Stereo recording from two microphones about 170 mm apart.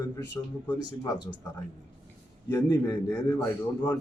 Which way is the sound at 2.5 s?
20° left (ahead or behind).